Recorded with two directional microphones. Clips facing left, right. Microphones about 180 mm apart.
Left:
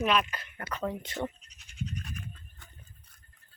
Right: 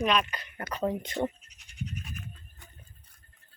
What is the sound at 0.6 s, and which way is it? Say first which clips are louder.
Speech: right 4 dB; 30° right (ahead or behind).